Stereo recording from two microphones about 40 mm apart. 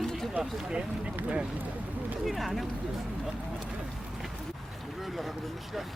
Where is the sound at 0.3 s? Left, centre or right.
Right.